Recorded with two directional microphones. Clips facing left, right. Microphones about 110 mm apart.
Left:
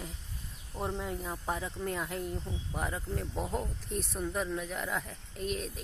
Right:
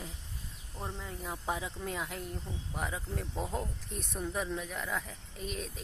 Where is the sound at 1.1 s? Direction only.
Centre (ahead or behind).